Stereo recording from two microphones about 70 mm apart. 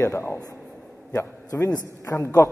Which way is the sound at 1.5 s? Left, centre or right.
Left.